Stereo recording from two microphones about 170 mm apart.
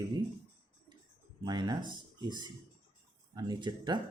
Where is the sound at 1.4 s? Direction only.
25° right (ahead or behind).